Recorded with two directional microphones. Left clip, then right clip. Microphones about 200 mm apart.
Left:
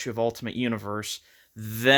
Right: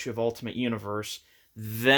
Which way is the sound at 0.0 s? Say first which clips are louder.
Left 2 dB; 35° left (ahead or behind).